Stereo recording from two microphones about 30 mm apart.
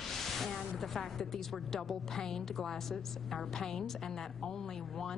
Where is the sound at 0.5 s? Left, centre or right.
Centre.